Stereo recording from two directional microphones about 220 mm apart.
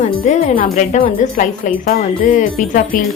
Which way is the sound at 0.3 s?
35° left (ahead or behind).